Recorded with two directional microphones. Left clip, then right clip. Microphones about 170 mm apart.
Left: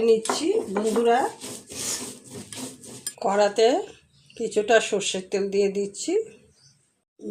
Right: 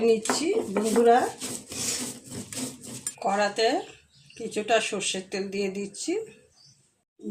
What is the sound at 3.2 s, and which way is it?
Speech, 30° left (ahead or behind).